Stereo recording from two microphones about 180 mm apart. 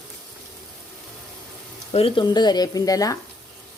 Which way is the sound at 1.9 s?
30° left (ahead or behind).